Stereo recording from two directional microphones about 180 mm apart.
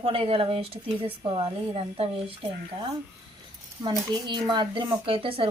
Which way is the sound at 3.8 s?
20° right (ahead or behind).